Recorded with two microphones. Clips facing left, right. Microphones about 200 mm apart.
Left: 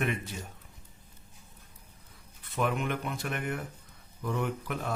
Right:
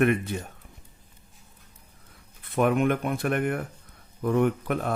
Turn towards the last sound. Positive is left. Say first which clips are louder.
# right 7 dB
turn(degrees=-55)  # may be behind; listen again after turning